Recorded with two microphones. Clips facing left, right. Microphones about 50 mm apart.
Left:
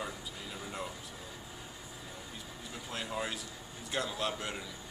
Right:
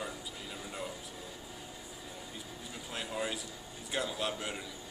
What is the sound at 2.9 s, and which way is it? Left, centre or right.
Speech, centre.